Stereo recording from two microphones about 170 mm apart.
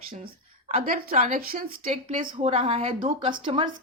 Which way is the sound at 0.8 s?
55° right (ahead or behind).